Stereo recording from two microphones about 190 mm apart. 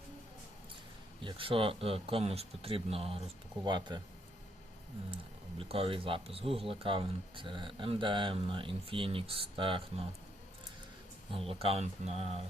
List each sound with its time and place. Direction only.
1.2 s speech: 25° right (ahead or behind)
5.1 s speech: 30° right (ahead or behind)
11.3 s speech: 30° right (ahead or behind)